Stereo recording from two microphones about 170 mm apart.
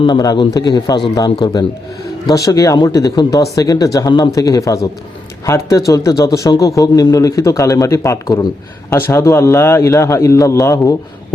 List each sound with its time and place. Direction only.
0.0 s a man's voice: 25° left (ahead or behind)